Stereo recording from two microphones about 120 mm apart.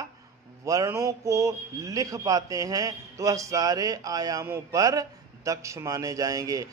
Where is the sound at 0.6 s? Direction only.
30° right (ahead or behind).